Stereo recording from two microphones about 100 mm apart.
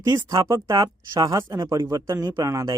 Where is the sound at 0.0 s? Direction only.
40° right (ahead or behind).